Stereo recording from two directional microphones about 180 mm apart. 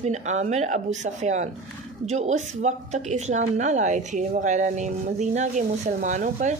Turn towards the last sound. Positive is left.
turn(degrees=-40)  # may be behind; listen again after turning